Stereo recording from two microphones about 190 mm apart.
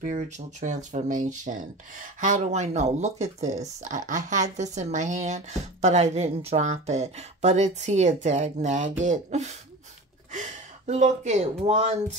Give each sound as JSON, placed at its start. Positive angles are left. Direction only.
{"t": 0.0, "sound": "speech", "side_deg": -40}